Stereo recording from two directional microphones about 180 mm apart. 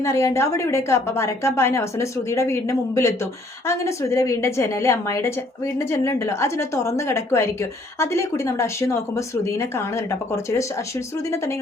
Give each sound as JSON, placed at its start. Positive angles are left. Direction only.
{"t": 0.0, "sound": "a woman's voice", "side_deg": 15}